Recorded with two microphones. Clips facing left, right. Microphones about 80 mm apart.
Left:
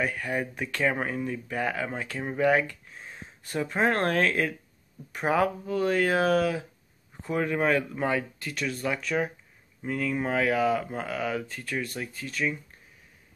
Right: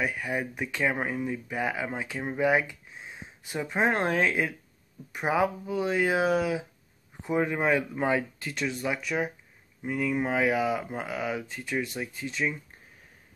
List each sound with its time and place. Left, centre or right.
0.0 s speech: centre